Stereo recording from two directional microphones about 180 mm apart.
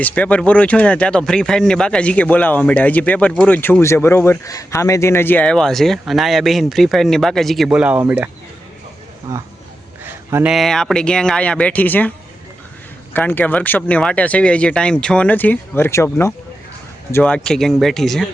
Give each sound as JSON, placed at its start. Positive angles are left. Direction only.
{"t": 0.0, "sound": "speech", "side_deg": 10}
{"t": 10.0, "sound": "a sound", "side_deg": -10}
{"t": 10.5, "sound": "speech", "side_deg": 0}
{"t": 13.1, "sound": "speech", "side_deg": 10}